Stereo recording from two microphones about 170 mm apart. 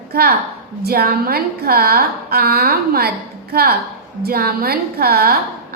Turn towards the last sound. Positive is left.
turn(degrees=-65)  # may be behind; listen again after turning